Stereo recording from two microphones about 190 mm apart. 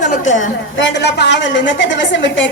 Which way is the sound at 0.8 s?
65° left (ahead or behind).